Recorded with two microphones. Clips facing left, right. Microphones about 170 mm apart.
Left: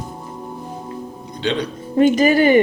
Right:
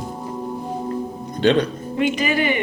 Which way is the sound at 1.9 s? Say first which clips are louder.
Left 7 dB; 40° left (ahead or behind).